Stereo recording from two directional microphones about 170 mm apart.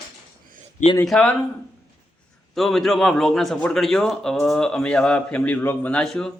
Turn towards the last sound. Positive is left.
turn(degrees=5)  # may be behind; listen again after turning